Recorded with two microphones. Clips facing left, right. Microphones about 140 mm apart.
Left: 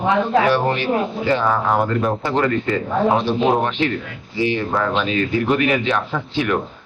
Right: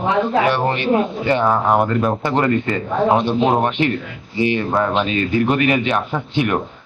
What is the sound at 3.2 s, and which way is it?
Speech, 20° right (ahead or behind).